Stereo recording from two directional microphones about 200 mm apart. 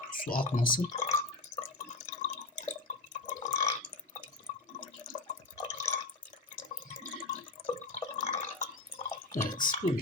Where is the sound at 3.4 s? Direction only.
15° left (ahead or behind).